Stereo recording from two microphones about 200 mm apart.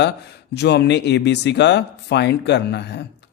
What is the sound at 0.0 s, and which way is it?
Speech, 55° left (ahead or behind).